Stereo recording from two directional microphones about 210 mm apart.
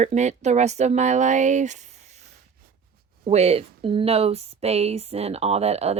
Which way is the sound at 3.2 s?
30° right (ahead or behind).